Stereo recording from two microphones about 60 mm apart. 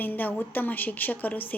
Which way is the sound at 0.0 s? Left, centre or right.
Left.